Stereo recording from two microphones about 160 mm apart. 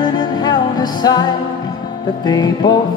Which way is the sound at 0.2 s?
25° left (ahead or behind).